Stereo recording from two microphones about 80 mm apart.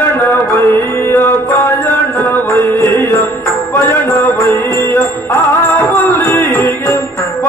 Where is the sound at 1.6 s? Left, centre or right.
Left.